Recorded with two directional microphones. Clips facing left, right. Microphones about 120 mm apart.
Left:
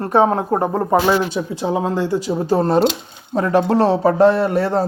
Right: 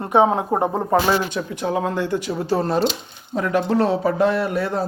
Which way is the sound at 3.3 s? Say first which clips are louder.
Left 4 dB; 35° left (ahead or behind).